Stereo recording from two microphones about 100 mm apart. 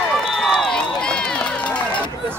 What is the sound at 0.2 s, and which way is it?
Run, centre (ahead or behind).